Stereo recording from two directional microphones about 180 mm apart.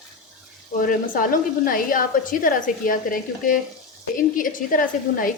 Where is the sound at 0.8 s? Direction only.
50° left (ahead or behind).